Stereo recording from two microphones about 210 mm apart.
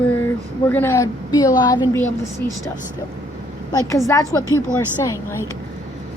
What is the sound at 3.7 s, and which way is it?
Speech, 15° left (ahead or behind).